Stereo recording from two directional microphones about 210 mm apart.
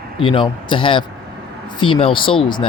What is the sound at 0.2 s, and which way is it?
Speech, 25° left (ahead or behind).